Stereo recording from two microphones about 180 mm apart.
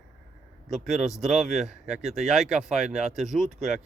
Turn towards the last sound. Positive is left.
turn(degrees=0)  # may be behind; listen again after turning